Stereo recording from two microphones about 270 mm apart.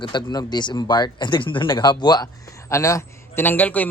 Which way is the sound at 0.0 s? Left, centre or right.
Centre.